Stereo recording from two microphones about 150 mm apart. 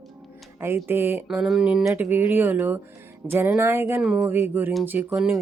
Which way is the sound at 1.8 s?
15° right (ahead or behind).